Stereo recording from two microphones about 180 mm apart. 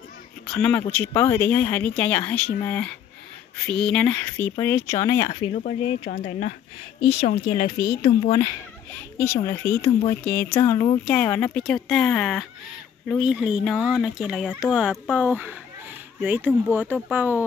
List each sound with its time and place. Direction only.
0.5 s speech: 10° left (ahead or behind)
5.8 s speech: 35° left (ahead or behind)
7.1 s speech: 65° left (ahead or behind)
7.5 s speech: 25° left (ahead or behind); by 17.4 s 10° right (ahead or behind)